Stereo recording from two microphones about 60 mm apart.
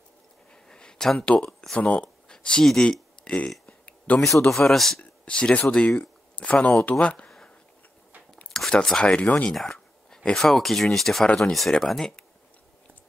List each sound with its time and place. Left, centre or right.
0.7 s a sound: centre
1.2 s speech: centre
1.8 s a sound: centre
4.5 s speech: centre
5.2 s speech: centre
7.2 s a sound: centre
8.8 s speech: centre
11.2 s speech: centre
11.5 s speech: centre